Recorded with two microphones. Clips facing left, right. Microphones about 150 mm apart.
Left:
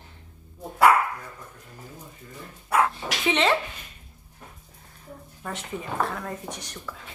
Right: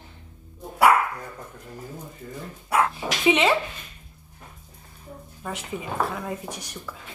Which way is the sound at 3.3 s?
10° right (ahead or behind).